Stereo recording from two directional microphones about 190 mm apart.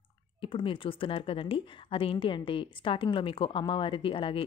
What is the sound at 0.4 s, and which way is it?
Speech, 25° left (ahead or behind).